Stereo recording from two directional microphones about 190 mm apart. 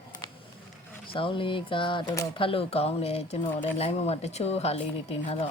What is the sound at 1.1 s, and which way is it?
A woman's voice, 25° left (ahead or behind).